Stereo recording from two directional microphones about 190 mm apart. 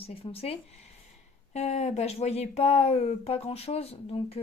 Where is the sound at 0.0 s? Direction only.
30° left (ahead or behind).